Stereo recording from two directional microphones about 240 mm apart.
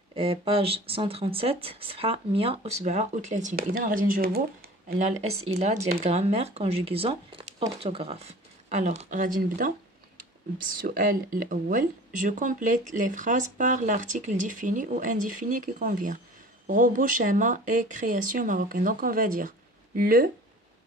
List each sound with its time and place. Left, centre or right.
0.1 s speech: right
10.8 s speech: right